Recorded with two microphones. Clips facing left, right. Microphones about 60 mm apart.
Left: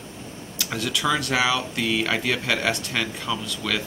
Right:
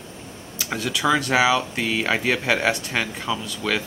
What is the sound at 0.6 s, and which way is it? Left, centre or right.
Speech, centre.